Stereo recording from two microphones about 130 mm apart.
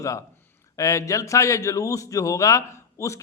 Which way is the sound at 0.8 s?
25° left (ahead or behind).